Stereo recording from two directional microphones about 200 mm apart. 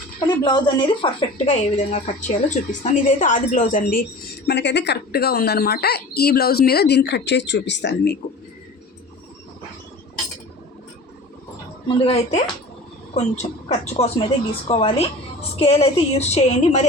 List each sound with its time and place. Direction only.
0.2 s a woman's voice: 20° left (ahead or behind); by 4.0 s 45° left (ahead or behind)
4.4 s a woman's voice: 60° left (ahead or behind)
11.9 s a woman's voice: 25° left (ahead or behind)